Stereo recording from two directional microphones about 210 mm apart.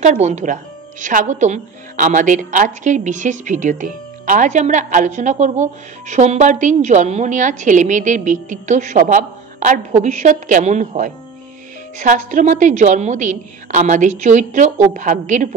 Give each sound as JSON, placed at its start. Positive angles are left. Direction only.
{"t": 0.0, "sound": "a woman's voice", "side_deg": -35}